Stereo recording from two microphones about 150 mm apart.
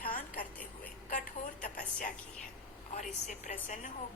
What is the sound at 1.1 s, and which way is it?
Speech, 60° left (ahead or behind).